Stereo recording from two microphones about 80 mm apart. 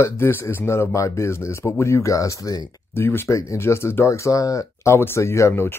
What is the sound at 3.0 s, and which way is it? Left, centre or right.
Speech, left.